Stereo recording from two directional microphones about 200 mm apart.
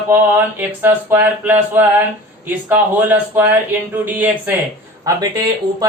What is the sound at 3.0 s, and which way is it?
Speech, 10° right (ahead or behind).